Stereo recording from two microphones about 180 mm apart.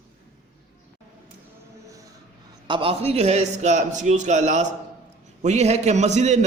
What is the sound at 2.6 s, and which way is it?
A man's voice, 30° right (ahead or behind).